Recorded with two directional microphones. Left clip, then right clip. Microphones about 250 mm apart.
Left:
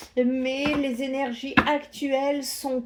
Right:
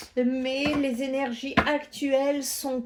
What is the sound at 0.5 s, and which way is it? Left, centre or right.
Speech, right.